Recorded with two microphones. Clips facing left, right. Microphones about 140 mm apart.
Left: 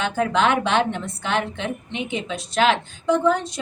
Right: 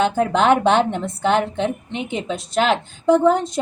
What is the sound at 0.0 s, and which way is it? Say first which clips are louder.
A woman's voice: right 3 dB; 45° right (ahead or behind).